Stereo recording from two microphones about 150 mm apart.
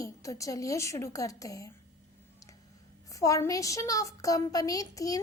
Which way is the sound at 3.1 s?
20° left (ahead or behind).